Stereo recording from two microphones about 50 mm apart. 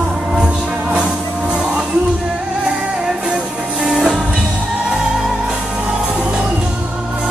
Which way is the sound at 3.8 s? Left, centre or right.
Centre.